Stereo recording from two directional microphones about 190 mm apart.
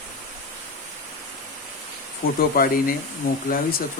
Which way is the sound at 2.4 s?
50° left (ahead or behind).